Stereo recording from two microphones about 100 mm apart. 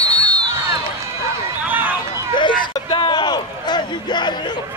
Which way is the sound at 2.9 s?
55° left (ahead or behind).